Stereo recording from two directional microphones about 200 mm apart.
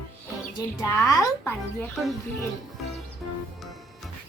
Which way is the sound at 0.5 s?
15° left (ahead or behind).